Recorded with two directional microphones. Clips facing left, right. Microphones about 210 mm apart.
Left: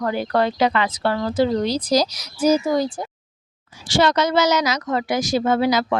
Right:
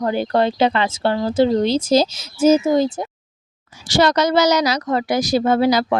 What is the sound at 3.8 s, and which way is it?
A woman's voice, 40° right (ahead or behind).